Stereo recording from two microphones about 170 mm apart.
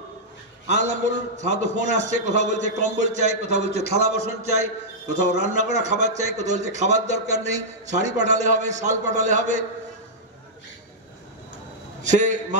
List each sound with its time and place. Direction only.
0.7 s a man's voice: 45° right (ahead or behind)
12.0 s a man's voice: 45° right (ahead or behind)